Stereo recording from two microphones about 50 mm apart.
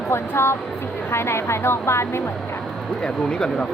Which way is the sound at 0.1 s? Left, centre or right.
Left.